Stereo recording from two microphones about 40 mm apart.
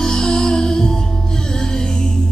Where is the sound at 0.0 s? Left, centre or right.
Centre.